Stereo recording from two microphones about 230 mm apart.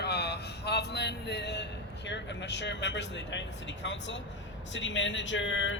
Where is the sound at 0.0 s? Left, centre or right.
Left.